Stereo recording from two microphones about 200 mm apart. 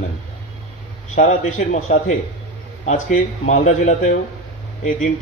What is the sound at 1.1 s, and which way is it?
Speech, 35° left (ahead or behind).